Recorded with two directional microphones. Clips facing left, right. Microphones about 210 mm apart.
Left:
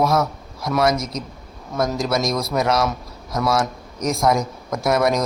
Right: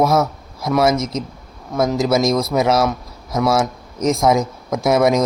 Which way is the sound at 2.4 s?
5° right (ahead or behind).